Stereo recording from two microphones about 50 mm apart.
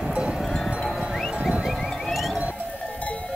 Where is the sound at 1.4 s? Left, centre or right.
Right.